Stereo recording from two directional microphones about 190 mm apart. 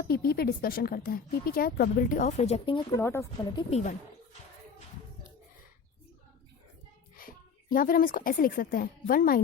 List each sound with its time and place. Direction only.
0.0 s speech: 55° left (ahead or behind); by 2.8 s 30° left (ahead or behind)
2.9 s speech: 15° left (ahead or behind)
3.6 s speech: 35° left (ahead or behind)
7.2 s a woman's voice: 50° left (ahead or behind)